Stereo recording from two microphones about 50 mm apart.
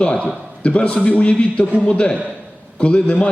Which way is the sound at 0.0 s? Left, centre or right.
Left.